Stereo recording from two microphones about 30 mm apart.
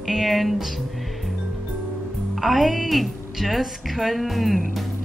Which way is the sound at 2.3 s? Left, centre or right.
Centre.